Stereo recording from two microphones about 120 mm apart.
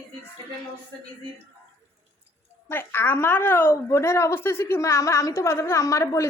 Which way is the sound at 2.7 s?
20° left (ahead or behind).